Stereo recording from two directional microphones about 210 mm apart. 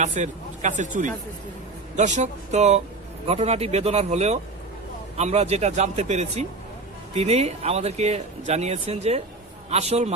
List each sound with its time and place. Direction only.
0.0 s speech: 35° right (ahead or behind)